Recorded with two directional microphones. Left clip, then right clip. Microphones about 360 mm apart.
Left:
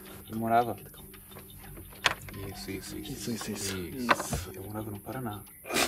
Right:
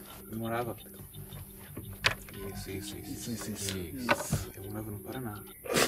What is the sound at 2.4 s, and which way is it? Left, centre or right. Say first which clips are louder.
Speech: left 1 dB; centre.